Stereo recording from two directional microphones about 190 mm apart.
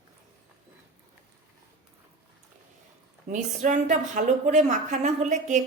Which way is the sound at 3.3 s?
40° right (ahead or behind).